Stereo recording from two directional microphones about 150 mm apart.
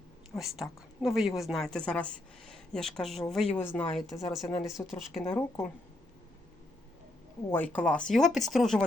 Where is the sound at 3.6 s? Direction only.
15° left (ahead or behind).